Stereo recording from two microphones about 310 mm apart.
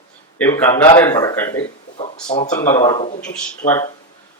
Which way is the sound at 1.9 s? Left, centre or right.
Left.